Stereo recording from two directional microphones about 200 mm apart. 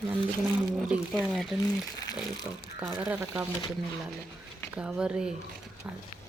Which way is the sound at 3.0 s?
10° right (ahead or behind).